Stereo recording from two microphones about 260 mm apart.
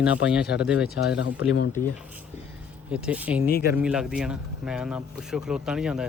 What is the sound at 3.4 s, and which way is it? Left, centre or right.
Speech, left.